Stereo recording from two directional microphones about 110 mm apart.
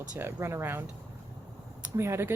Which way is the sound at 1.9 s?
25° right (ahead or behind).